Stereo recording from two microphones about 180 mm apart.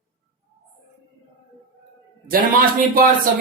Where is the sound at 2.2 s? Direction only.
55° right (ahead or behind).